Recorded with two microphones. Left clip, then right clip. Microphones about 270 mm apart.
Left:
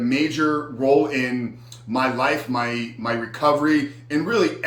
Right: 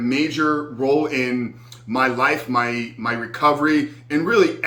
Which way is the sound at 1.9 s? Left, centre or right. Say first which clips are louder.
Right 2 dB; centre.